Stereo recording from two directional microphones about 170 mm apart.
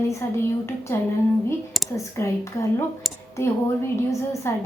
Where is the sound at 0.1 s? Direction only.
15° left (ahead or behind).